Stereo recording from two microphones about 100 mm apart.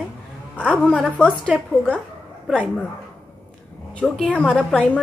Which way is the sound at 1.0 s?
15° left (ahead or behind).